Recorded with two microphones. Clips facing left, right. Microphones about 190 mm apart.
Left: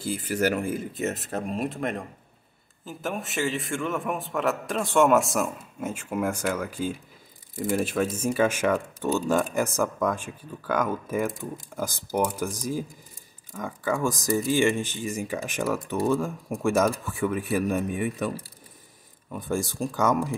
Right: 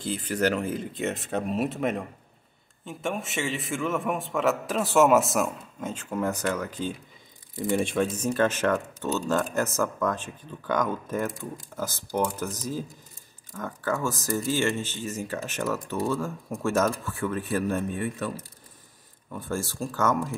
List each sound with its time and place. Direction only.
0.0 s a man's voice: 10° left (ahead or behind)